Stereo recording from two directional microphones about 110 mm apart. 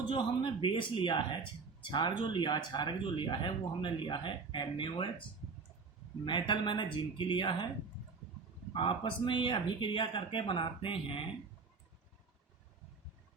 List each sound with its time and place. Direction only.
0.1 s speech: 45° left (ahead or behind)
6.2 s speech: 45° left (ahead or behind)
8.7 s speech: 50° left (ahead or behind)